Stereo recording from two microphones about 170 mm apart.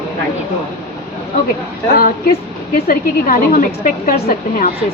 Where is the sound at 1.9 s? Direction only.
60° left (ahead or behind).